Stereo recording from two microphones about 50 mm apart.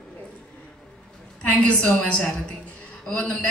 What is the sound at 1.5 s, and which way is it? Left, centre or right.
A woman's voice, left.